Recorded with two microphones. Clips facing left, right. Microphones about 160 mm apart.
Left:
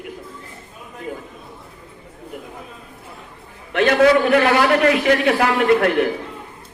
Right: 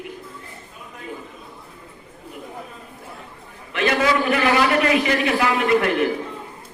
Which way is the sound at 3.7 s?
60° left (ahead or behind).